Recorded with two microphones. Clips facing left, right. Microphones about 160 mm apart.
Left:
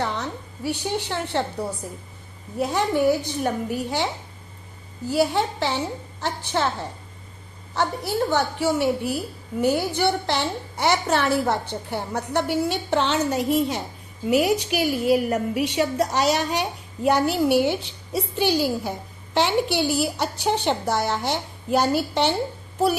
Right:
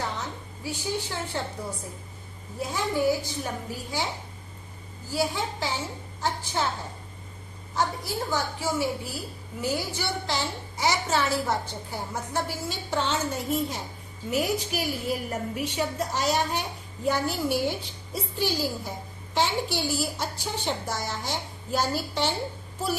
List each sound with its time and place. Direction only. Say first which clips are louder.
0.0 s a sound: left 5 dB; 70° left (ahead or behind)
2.6 s a woman's voice: left 6 dB; 65° left (ahead or behind)
5.0 s a woman's voice: left 7 dB; 65° left (ahead or behind)
7.8 s a woman's voice: left 5 dB; 65° left (ahead or behind)